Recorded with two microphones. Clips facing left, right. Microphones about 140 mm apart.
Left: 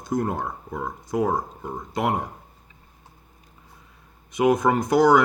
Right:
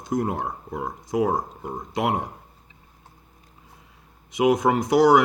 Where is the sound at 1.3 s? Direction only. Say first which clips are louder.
Even; 50° right (ahead or behind).